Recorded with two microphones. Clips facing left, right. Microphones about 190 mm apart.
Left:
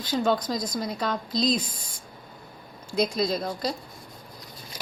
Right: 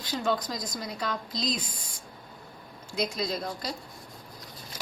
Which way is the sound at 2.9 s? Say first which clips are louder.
Left 6 dB; 35° left (ahead or behind).